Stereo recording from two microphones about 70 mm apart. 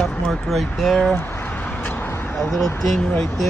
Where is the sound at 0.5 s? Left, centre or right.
Centre.